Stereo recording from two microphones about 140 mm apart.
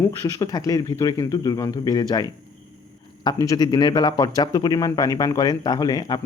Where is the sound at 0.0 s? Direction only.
25° left (ahead or behind).